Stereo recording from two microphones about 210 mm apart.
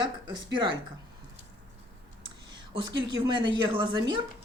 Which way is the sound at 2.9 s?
20° right (ahead or behind).